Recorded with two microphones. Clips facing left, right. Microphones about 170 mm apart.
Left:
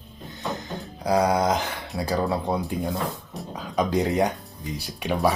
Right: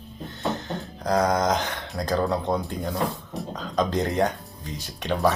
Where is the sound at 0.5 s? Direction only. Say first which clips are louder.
Right 2 dB; 10° left (ahead or behind).